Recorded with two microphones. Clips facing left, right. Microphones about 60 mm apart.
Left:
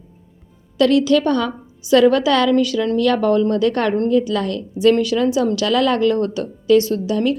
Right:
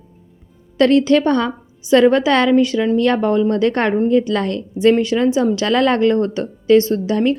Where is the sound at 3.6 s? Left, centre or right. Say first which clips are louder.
Right 1 dB; right.